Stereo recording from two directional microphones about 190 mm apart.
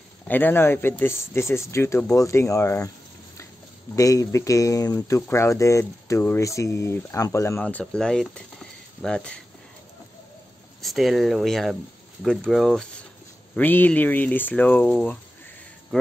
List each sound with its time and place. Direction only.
0.3 s speech: 10° left (ahead or behind)
3.9 s speech: 15° left (ahead or behind)
10.8 s speech: centre (ahead or behind)